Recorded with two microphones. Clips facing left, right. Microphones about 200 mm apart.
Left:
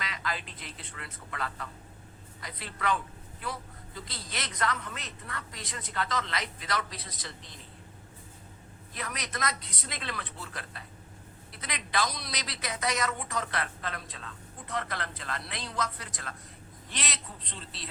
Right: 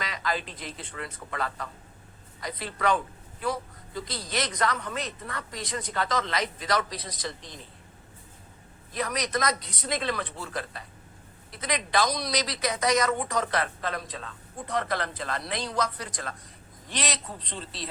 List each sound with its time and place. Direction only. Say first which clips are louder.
0.0 s a man's voice: right 5 dB; 40° right (ahead or behind)
3.9 s a man's voice: right 9 dB; 40° right (ahead or behind)
9.0 s a man's voice: right 8 dB; 40° right (ahead or behind)